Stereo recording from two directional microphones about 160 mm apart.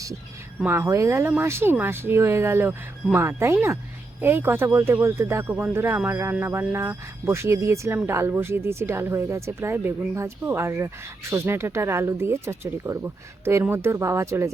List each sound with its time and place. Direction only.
0.6 s speech: 15° right (ahead or behind)